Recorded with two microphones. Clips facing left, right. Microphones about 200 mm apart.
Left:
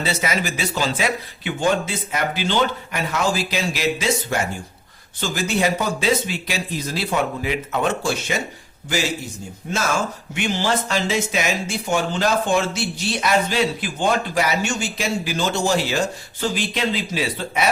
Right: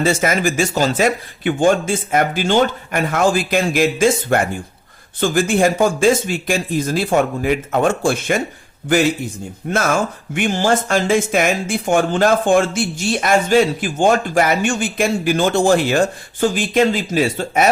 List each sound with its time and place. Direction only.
0.0 s a man's voice: 50° right (ahead or behind)